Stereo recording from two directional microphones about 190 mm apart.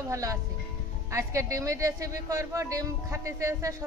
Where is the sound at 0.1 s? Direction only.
15° right (ahead or behind).